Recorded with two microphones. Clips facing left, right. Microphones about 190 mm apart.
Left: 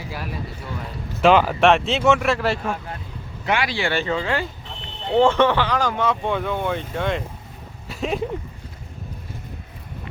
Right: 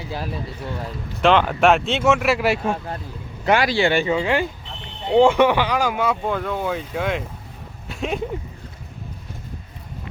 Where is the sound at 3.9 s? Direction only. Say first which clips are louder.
Right 3 dB; 15° right (ahead or behind).